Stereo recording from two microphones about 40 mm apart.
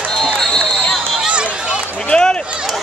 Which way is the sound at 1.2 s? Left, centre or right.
Right.